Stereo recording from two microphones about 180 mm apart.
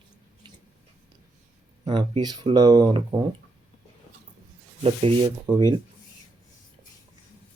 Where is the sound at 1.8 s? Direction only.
25° right (ahead or behind).